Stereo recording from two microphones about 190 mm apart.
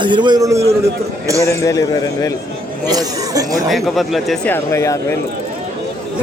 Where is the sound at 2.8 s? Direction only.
20° right (ahead or behind).